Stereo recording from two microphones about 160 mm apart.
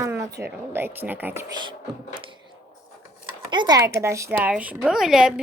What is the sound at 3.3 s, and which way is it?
Speech, 30° right (ahead or behind).